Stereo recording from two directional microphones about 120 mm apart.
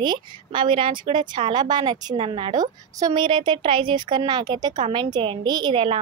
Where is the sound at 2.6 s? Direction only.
35° right (ahead or behind).